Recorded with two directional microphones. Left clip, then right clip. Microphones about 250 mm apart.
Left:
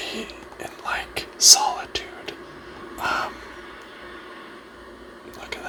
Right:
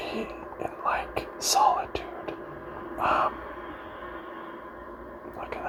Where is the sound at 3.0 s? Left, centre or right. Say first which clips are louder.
Right 1 dB; centre.